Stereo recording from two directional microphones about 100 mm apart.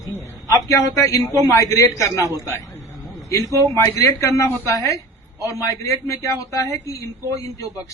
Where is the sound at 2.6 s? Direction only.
Centre (ahead or behind).